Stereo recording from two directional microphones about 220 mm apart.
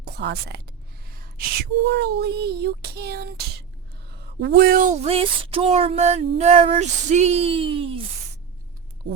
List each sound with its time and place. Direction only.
0.0 s speech: 50° right (ahead or behind); by 8.0 s 25° right (ahead or behind)